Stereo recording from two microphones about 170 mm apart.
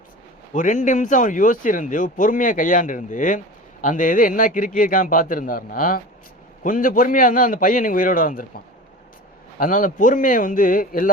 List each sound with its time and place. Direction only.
0.5 s speech: 45° left (ahead or behind)